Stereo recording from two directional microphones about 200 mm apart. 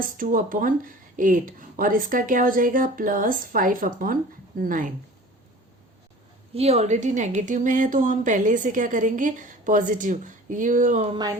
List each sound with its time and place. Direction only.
0.2 s speech: 45° right (ahead or behind)
6.5 s speech: 30° right (ahead or behind)